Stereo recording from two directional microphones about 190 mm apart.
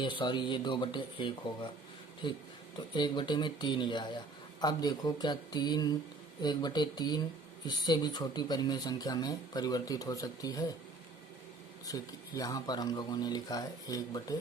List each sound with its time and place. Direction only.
0.0 s speech: 25° left (ahead or behind)
11.9 s speech: 20° left (ahead or behind)